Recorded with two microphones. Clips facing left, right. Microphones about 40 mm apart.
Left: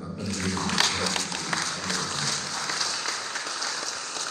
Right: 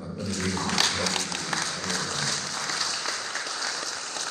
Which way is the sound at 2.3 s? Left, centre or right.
Left.